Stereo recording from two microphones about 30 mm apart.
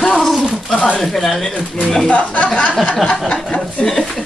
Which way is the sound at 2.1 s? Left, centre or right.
Left.